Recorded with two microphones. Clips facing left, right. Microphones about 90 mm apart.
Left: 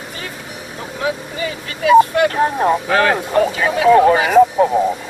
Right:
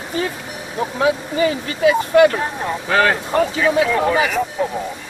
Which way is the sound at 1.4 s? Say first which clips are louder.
Right 8 dB; 30° right (ahead or behind).